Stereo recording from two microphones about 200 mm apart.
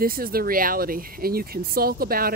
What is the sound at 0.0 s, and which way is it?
Speech, 45° right (ahead or behind).